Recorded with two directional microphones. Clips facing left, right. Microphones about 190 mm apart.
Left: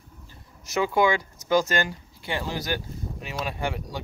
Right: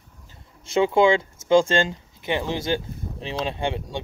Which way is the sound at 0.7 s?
25° right (ahead or behind).